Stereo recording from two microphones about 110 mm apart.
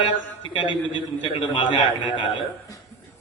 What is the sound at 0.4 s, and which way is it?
A man's voice, 50° left (ahead or behind).